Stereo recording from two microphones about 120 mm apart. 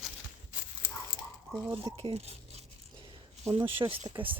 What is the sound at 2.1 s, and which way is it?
Speech, 60° right (ahead or behind).